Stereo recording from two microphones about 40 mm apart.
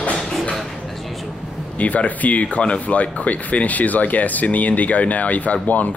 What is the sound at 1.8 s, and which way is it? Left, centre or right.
Speech, left.